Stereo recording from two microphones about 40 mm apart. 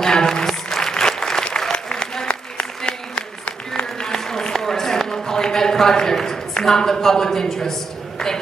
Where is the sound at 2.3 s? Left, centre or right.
Left.